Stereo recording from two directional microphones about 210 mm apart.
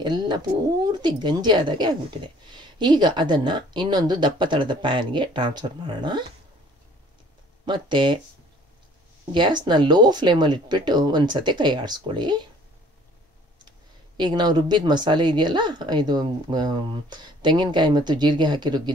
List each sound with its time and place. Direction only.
0.0 s a sound: 20° right (ahead or behind)
0.8 s speech: 20° right (ahead or behind)
7.6 s speech: 20° right (ahead or behind)
9.3 s speech: 20° right (ahead or behind)
13.7 s speech: 20° right (ahead or behind)